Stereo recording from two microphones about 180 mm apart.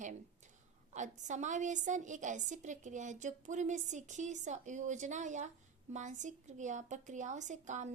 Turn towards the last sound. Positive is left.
turn(degrees=-40)  # may be behind; listen again after turning